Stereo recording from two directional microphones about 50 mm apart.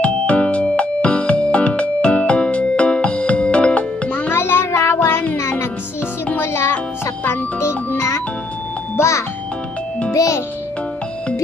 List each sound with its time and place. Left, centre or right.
0.0 s music: left
4.3 s music: left
6.3 s music: left
8.9 s music: left
10.1 s music: left